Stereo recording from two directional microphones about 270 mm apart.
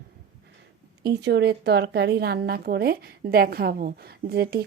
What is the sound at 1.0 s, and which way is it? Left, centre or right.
A woman's voice, right.